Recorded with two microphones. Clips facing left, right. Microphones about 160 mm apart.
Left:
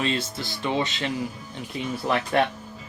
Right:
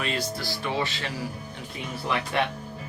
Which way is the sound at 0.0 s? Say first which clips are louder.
Left 2 dB; 25° left (ahead or behind).